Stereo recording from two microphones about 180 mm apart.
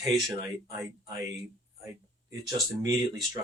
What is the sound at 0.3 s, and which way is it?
Speech, 20° right (ahead or behind).